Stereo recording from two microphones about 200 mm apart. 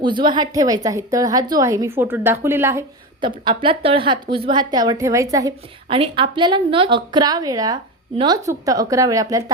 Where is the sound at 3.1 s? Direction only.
25° right (ahead or behind).